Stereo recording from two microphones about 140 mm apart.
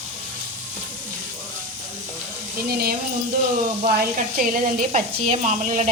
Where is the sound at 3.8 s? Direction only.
75° right (ahead or behind).